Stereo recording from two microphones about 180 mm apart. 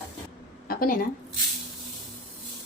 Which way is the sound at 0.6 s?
55° left (ahead or behind).